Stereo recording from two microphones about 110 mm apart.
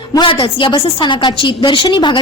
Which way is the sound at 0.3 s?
50° left (ahead or behind).